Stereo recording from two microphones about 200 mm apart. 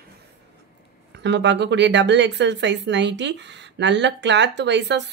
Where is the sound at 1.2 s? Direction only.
60° right (ahead or behind).